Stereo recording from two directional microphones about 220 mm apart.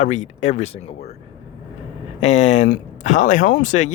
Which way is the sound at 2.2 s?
30° left (ahead or behind).